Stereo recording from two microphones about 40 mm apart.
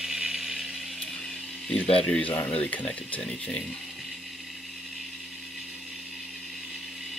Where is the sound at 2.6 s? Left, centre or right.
Left.